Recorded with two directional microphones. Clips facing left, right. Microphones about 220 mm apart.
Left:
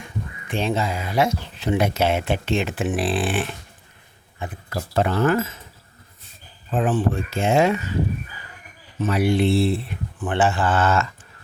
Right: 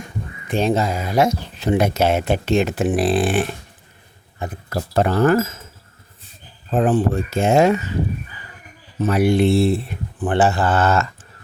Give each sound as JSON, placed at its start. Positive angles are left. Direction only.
{"t": 0.4, "sound": "speech", "side_deg": -40}
{"t": 6.7, "sound": "speech", "side_deg": -40}
{"t": 9.0, "sound": "speech", "side_deg": -40}